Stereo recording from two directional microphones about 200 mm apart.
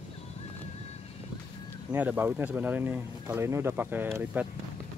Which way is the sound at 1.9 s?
10° right (ahead or behind).